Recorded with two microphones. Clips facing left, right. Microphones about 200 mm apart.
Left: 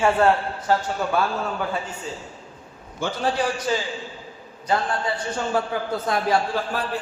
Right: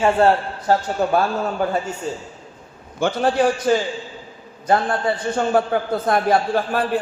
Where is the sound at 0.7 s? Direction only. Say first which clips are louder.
Right 5 dB; 45° right (ahead or behind).